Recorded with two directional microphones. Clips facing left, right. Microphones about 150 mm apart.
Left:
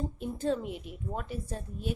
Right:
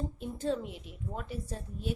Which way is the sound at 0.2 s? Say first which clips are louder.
Left 2 dB; 55° left (ahead or behind).